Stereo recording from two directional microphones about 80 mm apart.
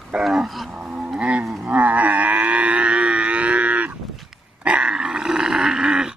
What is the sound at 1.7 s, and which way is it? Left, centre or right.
Livestock, centre.